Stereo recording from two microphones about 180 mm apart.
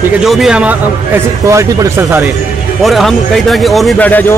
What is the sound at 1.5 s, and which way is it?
Speech, 15° right (ahead or behind).